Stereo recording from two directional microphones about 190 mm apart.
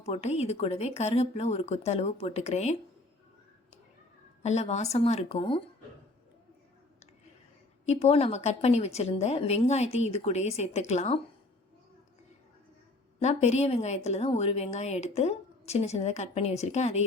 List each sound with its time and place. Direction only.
0.0 s a woman's voice: 35° left (ahead or behind)
4.4 s a woman's voice: 35° left (ahead or behind)
7.9 s a woman's voice: 35° left (ahead or behind)
13.2 s a woman's voice: 35° left (ahead or behind)